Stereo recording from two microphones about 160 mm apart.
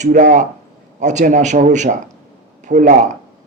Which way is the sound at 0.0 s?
50° right (ahead or behind).